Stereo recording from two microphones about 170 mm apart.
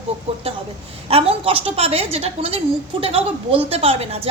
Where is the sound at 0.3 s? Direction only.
35° right (ahead or behind).